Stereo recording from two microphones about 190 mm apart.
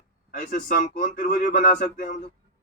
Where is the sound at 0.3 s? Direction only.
45° left (ahead or behind).